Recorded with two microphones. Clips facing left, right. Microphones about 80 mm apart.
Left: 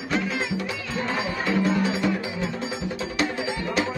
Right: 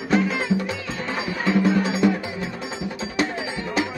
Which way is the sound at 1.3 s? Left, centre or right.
Right.